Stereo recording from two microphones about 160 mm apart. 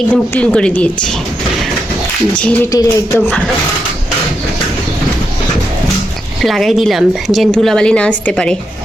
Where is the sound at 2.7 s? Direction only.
20° left (ahead or behind).